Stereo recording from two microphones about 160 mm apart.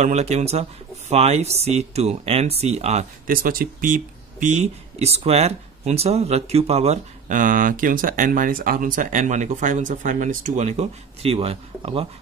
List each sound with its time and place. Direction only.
0.0 s speech: 45° right (ahead or behind)
3.3 s speech: 60° right (ahead or behind); by 12.1 s 35° right (ahead or behind)